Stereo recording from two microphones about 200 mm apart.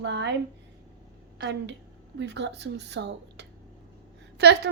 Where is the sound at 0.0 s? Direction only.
60° right (ahead or behind).